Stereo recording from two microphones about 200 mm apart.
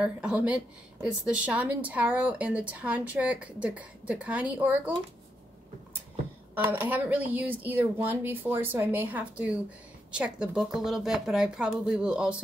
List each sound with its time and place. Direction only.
0.0 s a woman's voice: 5° right (ahead or behind)
6.5 s a woman's voice: 10° right (ahead or behind)